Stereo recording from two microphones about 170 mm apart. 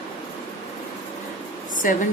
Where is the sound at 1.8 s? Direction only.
50° left (ahead or behind).